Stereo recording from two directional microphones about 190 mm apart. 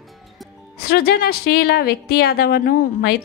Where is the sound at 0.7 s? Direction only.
55° left (ahead or behind).